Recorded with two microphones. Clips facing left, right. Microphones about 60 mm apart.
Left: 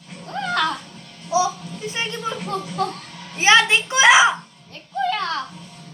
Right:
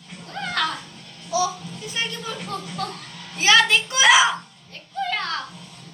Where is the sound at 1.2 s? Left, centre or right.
Left.